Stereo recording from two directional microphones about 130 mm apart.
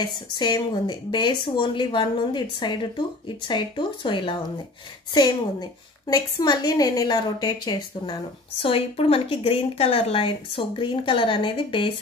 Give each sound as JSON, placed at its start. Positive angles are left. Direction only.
{"t": 0.0, "sound": "a woman's voice", "side_deg": 35}